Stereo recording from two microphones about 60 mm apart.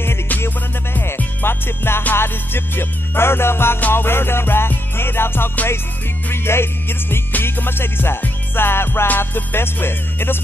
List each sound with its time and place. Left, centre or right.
0.9 s music: left